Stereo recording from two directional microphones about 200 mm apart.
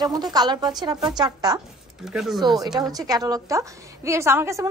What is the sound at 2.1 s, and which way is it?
Speech, centre (ahead or behind).